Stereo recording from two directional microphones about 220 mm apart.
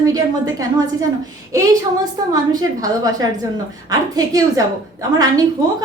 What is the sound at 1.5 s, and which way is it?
A woman's voice, 15° right (ahead or behind).